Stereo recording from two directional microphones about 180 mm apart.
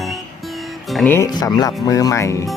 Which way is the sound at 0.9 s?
10° left (ahead or behind).